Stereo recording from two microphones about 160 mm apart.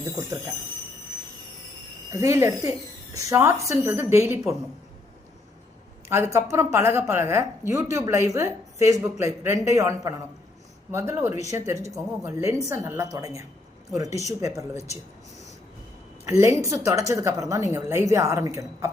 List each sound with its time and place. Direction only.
0.0 s a woman's voice: 20° right (ahead or behind)
2.1 s a woman's voice: 15° right (ahead or behind)
6.1 s a woman's voice: 15° right (ahead or behind)
16.4 s a woman's voice: 20° right (ahead or behind)